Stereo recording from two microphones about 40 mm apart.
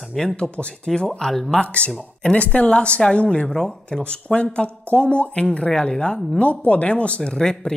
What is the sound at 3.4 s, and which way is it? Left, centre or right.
Speech, centre.